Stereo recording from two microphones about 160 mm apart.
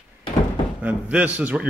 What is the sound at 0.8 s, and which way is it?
Speech, 10° right (ahead or behind).